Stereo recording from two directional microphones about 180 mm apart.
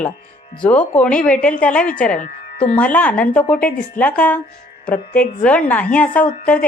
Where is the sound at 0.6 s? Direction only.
5° left (ahead or behind).